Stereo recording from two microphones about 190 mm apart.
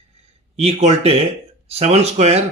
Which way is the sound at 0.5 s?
35° right (ahead or behind).